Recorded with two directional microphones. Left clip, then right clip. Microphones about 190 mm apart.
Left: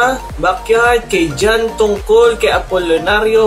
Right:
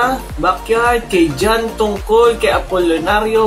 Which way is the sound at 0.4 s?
5° left (ahead or behind).